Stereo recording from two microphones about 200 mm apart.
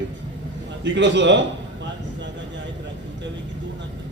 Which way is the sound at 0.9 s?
60° right (ahead or behind).